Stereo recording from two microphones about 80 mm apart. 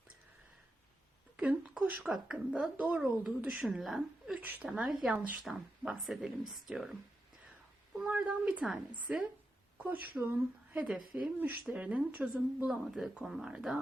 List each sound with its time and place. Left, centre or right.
1.4 s speech: centre
4.4 s speech: right
4.7 s speech: centre
5.0 s speech: centre
5.5 s speech: centre
8.1 s speech: centre
9.7 s speech: right
12.8 s speech: centre